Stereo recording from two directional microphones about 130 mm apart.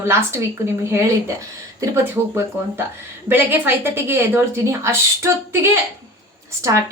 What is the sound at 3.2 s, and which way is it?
A woman's voice, 15° right (ahead or behind).